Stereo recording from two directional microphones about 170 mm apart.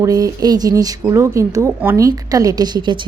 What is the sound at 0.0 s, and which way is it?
Speech, 20° right (ahead or behind).